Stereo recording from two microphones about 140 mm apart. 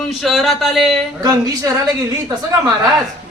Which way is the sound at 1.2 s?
25° right (ahead or behind).